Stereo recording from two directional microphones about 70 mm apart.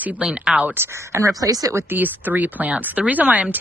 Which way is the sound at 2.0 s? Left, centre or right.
Right.